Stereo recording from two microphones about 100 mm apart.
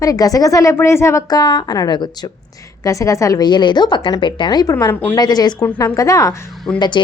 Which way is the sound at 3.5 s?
50° left (ahead or behind).